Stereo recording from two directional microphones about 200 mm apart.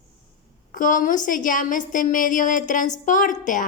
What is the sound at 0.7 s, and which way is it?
A child's voice, 40° left (ahead or behind).